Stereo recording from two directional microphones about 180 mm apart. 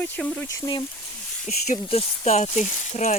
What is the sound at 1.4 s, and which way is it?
Speech, 35° left (ahead or behind).